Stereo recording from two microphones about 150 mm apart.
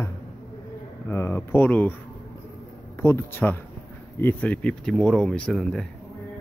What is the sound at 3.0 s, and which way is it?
Speech, 15° left (ahead or behind).